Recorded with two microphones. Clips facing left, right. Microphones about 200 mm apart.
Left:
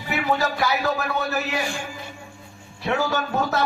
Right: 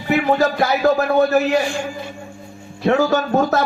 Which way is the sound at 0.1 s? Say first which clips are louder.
Right 7 dB; 50° right (ahead or behind).